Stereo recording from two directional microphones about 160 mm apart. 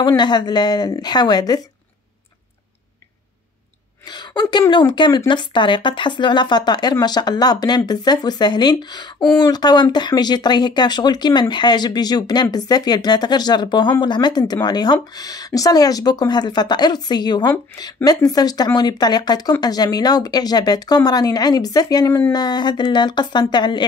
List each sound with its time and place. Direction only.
0.0 s speech: 25° left (ahead or behind)
4.0 s speech: 25° left (ahead or behind)